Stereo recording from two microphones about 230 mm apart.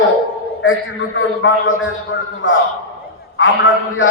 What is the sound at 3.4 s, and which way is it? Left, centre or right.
Speech, left.